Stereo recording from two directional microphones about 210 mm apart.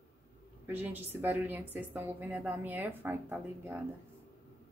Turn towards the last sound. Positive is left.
turn(degrees=-10)  # may be behind; listen again after turning